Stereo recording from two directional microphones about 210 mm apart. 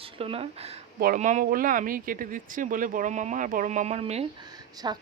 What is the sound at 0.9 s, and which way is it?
Speech, 45° right (ahead or behind).